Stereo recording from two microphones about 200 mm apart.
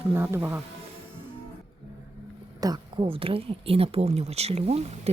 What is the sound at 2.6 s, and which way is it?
Speech, 20° right (ahead or behind).